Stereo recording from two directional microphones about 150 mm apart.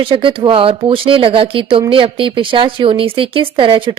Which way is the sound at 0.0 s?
35° right (ahead or behind).